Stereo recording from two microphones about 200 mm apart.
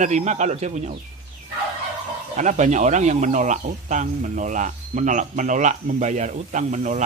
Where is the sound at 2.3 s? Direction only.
35° right (ahead or behind).